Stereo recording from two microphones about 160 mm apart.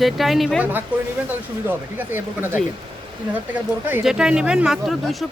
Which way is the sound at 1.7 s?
10° right (ahead or behind).